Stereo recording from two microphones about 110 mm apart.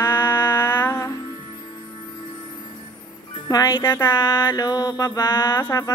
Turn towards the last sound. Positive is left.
turn(degrees=30)  # may be behind; listen again after turning